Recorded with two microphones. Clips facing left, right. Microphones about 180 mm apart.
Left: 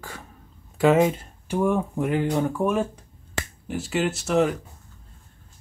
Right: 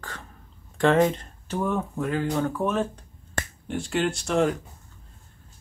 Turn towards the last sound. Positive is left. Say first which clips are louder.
# left 1 dB
turn(degrees=5)  # may be behind; listen again after turning